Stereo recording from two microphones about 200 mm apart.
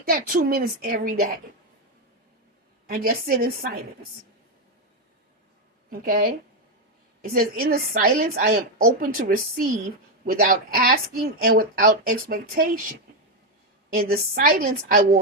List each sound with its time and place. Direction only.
0.0 s a woman's voice: 45° right (ahead or behind)
2.8 s a woman's voice: 45° right (ahead or behind)
5.9 s a woman's voice: 45° right (ahead or behind)
13.9 s a woman's voice: 45° right (ahead or behind)